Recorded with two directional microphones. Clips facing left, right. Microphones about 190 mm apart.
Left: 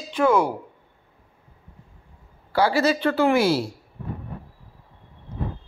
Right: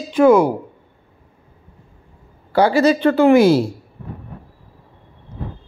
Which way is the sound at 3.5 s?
55° right (ahead or behind).